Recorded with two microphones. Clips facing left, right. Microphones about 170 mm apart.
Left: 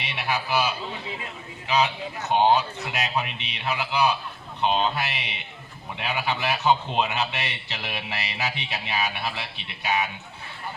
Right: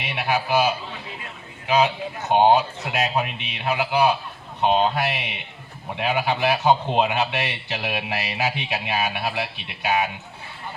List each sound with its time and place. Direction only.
0.0 s music: 50° right (ahead or behind)
1.6 s a man's voice: 50° right (ahead or behind)